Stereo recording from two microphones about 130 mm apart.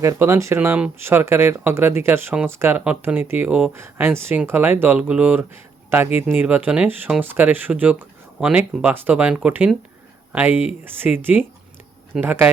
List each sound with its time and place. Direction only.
0.0 s speech: 20° right (ahead or behind)